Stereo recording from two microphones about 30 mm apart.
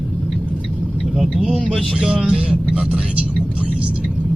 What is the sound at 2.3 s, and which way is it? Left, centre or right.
Speech, right.